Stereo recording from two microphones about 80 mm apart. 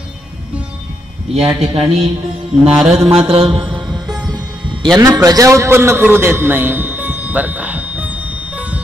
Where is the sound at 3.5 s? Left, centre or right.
Right.